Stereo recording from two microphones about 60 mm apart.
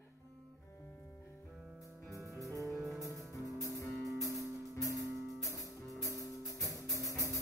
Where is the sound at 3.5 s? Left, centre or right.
Right.